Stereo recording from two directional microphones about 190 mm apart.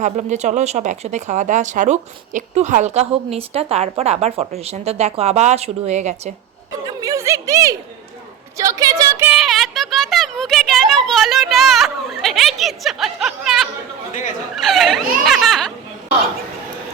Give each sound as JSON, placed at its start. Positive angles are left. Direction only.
{"t": 0.0, "sound": "speech", "side_deg": -35}
{"t": 6.8, "sound": "speech", "side_deg": -20}
{"t": 9.3, "sound": "speech", "side_deg": 0}
{"t": 14.1, "sound": "speech", "side_deg": 40}
{"t": 14.5, "sound": "speech", "side_deg": 0}